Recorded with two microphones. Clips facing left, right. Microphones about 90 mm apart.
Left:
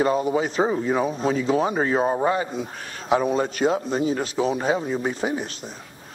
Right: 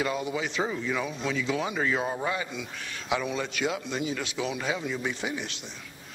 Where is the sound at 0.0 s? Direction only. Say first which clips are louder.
Left 8 dB; 40° left (ahead or behind).